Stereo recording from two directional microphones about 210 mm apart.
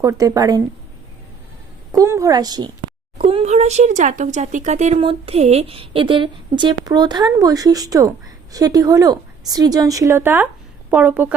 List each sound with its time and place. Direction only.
0.0 s a woman's voice: 15° right (ahead or behind)
1.9 s a woman's voice: 15° right (ahead or behind)